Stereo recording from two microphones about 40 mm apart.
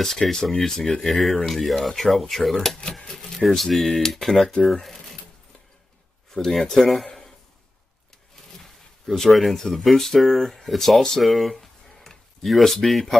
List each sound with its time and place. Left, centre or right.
0.0 s speech: centre
0.7 s speech: centre
1.0 s speech: centre
6.3 s speech: centre
9.0 s speech: centre
11.2 s a sound: centre